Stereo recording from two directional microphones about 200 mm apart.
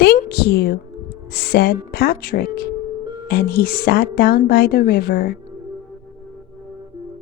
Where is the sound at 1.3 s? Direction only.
50° left (ahead or behind).